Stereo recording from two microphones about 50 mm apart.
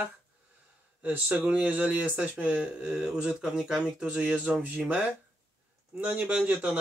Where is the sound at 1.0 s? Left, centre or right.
Right.